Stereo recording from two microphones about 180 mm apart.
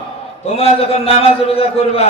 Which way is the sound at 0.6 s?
35° left (ahead or behind).